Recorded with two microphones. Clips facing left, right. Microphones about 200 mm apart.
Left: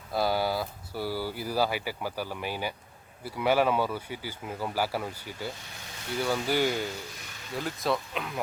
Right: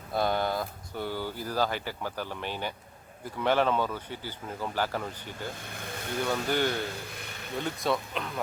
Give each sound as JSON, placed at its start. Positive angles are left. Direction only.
{"t": 0.1, "sound": "speech", "side_deg": 5}
{"t": 5.5, "sound": "vehicle", "side_deg": -55}
{"t": 6.2, "sound": "speech", "side_deg": 5}